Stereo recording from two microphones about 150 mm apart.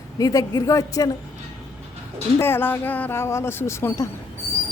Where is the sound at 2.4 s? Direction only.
15° left (ahead or behind).